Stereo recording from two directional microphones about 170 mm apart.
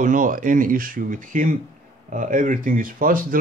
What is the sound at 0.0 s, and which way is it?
Speech, 50° right (ahead or behind).